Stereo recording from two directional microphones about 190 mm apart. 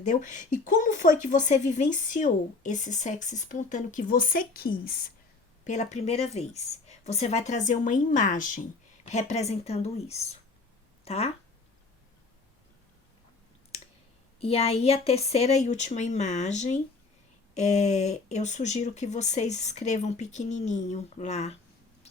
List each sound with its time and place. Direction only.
0.0 s a woman's voice: 40° left (ahead or behind)
5.6 s a woman's voice: 35° left (ahead or behind)
14.4 s a woman's voice: 30° left (ahead or behind)